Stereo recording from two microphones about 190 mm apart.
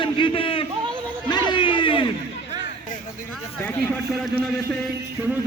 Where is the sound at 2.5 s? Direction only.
20° right (ahead or behind).